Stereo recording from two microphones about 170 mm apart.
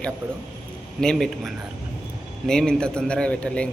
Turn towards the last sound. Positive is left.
turn(degrees=5)  # may be behind; listen again after turning